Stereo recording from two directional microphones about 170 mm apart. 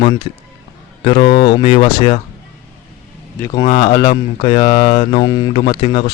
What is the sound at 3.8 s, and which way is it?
Speech, 25° left (ahead or behind).